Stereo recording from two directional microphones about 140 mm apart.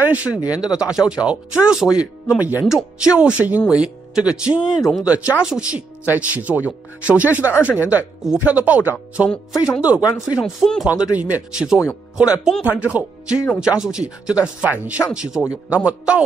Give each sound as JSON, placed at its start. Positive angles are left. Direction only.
{"t": 0.0, "sound": "speech", "side_deg": -10}
{"t": 7.5, "sound": "speech", "side_deg": 15}
{"t": 7.9, "sound": "speech", "side_deg": -10}
{"t": 10.9, "sound": "speech", "side_deg": -10}